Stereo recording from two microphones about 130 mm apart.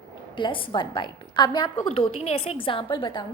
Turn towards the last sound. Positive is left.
turn(degrees=35)  # may be behind; listen again after turning